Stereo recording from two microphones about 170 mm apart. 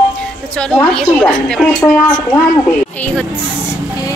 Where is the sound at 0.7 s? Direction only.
5° left (ahead or behind).